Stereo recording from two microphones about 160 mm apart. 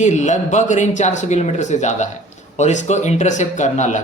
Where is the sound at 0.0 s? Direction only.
50° left (ahead or behind).